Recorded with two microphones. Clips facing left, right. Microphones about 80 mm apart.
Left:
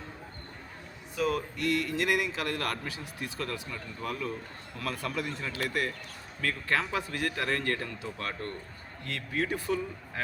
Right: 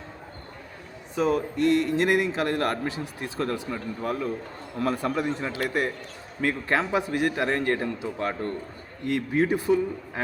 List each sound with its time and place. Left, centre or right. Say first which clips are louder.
1.1 s a man's voice: right 6 dB; right